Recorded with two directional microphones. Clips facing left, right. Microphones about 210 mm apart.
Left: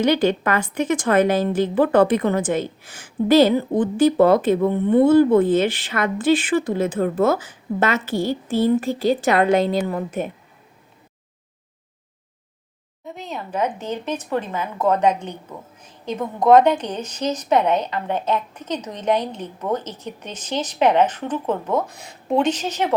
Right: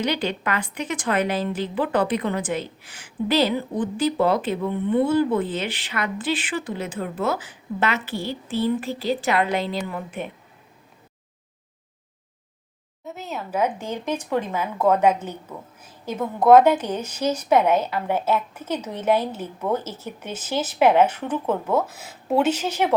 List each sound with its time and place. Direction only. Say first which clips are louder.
0.0 s a woman's voice: left 7 dB; 45° left (ahead or behind)
13.1 s a woman's voice: even; 5° right (ahead or behind)